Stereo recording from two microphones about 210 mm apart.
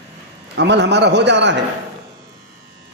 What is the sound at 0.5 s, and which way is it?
A man's voice, 55° right (ahead or behind).